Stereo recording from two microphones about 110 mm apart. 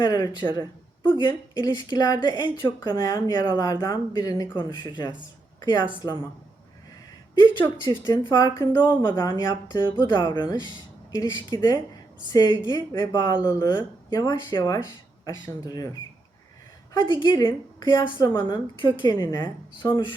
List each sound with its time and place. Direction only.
0.0 s a woman's voice: 40° left (ahead or behind)
7.3 s a woman's voice: 45° left (ahead or behind)
9.1 s speech: 30° left (ahead or behind)
17.0 s a woman's voice: 45° left (ahead or behind)